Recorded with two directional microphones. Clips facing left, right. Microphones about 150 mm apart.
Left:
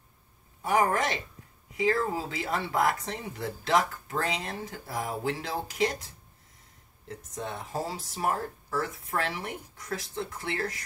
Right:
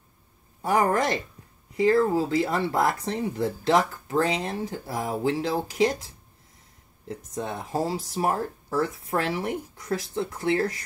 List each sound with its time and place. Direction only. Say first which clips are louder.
0.6 s speech: right 3 dB; 35° right (ahead or behind)
7.1 s speech: right 5 dB; 35° right (ahead or behind)